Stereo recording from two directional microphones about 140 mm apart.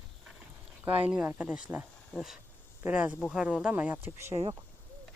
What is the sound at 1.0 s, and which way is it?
Speech, 10° right (ahead or behind).